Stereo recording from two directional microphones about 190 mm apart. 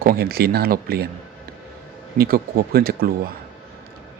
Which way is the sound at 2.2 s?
55° right (ahead or behind).